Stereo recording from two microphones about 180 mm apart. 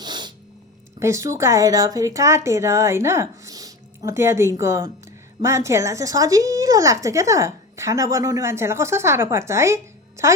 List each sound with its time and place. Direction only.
0.0 s sneeze: 25° right (ahead or behind)
0.9 s a woman's voice: 15° right (ahead or behind)